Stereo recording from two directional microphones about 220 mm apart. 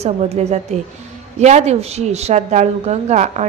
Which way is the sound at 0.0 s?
30° right (ahead or behind).